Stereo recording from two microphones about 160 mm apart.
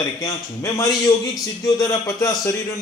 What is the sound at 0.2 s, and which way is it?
A man's voice, 20° left (ahead or behind).